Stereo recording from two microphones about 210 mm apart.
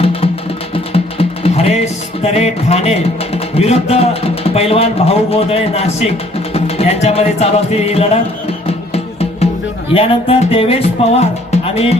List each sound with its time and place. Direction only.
0.0 s music: 25° left (ahead or behind)
9.9 s music: 25° left (ahead or behind)
11.5 s speech: 30° left (ahead or behind)